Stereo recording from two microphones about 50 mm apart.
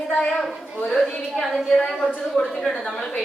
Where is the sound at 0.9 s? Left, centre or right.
Centre.